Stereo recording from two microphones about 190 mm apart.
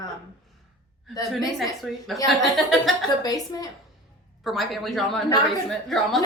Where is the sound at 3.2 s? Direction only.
20° left (ahead or behind).